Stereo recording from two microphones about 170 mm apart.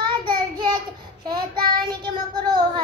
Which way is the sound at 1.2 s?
25° right (ahead or behind).